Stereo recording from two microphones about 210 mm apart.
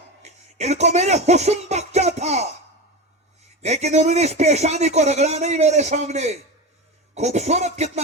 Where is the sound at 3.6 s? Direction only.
30° right (ahead or behind).